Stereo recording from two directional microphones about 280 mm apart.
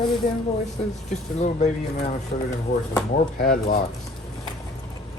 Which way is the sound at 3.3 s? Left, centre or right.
Left.